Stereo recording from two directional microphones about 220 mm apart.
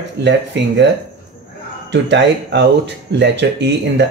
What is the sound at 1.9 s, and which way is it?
Speech, 55° right (ahead or behind).